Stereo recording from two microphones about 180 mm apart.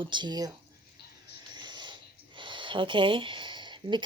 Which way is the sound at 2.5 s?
25° right (ahead or behind).